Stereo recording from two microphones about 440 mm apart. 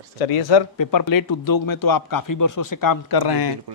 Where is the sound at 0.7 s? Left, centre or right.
Left.